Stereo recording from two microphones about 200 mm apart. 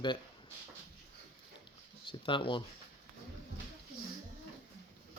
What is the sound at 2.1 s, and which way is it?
Speech, 25° left (ahead or behind).